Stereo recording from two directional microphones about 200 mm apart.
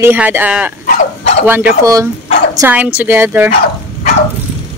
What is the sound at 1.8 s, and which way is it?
Speech, 15° right (ahead or behind).